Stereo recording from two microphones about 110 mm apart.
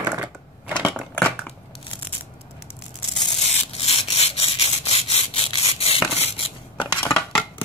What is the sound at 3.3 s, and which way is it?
Rub, 85° left.